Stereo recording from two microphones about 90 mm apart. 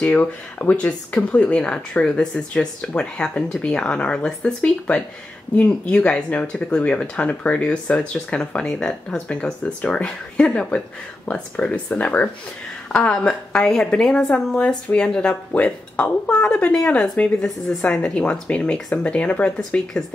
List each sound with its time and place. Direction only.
0.0 s speech: 15° left (ahead or behind)